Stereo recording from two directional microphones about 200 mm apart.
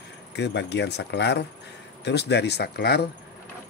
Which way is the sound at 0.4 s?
60° left (ahead or behind).